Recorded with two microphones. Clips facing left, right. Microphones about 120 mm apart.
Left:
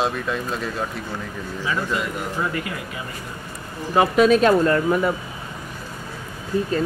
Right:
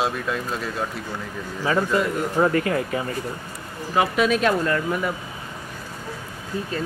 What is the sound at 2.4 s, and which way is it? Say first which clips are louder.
Speech: right 10 dB; 40° right (ahead or behind).